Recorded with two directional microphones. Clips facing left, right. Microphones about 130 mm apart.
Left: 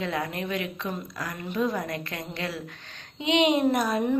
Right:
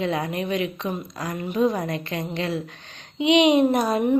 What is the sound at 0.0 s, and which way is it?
A woman's voice, 20° right (ahead or behind).